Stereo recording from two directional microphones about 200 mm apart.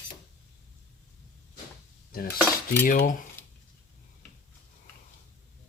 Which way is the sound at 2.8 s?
45° left (ahead or behind).